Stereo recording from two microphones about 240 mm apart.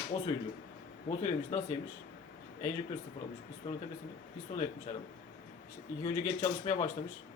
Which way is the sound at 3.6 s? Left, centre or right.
Left.